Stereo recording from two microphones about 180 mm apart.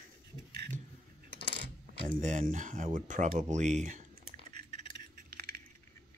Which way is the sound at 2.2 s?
45° right (ahead or behind).